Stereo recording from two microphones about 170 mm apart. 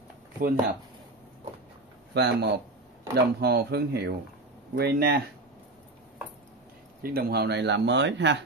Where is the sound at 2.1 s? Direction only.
75° right (ahead or behind).